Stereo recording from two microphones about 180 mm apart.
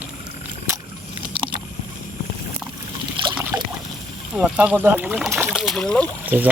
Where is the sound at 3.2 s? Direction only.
25° right (ahead or behind).